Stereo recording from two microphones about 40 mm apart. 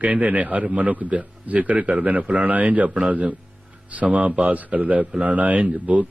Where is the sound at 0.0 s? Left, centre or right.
Right.